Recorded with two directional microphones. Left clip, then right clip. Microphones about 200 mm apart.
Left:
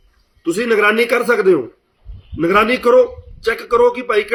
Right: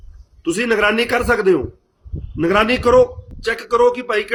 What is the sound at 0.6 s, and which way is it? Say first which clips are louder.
Speech: left 3 dB; 30° right (ahead or behind).